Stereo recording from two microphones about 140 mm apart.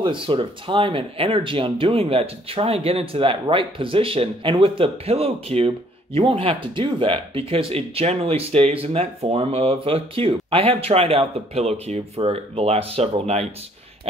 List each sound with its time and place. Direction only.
0.0 s speech: 35° right (ahead or behind)